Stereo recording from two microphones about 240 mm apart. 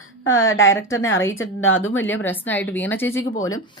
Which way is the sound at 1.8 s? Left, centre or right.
Centre.